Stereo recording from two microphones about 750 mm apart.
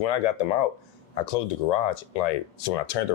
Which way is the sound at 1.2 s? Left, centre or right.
Left.